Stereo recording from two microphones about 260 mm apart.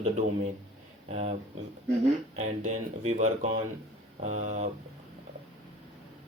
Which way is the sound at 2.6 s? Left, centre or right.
Right.